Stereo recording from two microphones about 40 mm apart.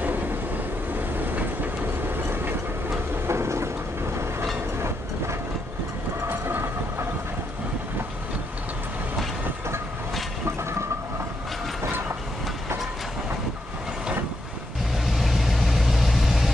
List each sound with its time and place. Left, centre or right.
0.0 s vehicle: right
0.9 s train: right
4.7 s train: right
6.2 s train: right
15.1 s vehicle: centre